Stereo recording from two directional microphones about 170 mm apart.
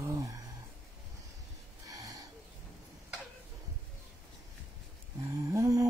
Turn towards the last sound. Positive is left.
turn(degrees=-20)  # may be behind; listen again after turning